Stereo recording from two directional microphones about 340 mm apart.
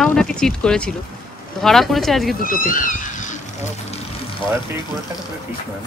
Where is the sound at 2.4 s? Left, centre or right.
Left.